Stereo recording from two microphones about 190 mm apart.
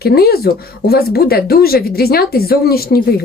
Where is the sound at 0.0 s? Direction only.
55° left (ahead or behind).